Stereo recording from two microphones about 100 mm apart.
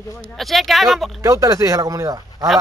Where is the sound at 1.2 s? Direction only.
35° right (ahead or behind).